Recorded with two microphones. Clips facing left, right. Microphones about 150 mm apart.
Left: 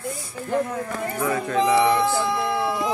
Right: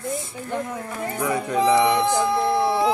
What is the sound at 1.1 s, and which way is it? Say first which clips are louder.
Speech: right 1 dB; 15° right (ahead or behind).